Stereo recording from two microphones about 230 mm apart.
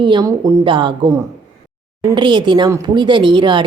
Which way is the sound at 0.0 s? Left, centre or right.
Centre.